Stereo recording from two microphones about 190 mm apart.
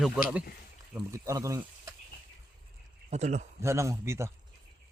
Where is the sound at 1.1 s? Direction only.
15° right (ahead or behind).